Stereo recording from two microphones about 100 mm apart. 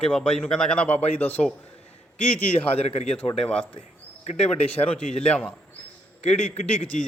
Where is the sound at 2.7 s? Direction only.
90° left.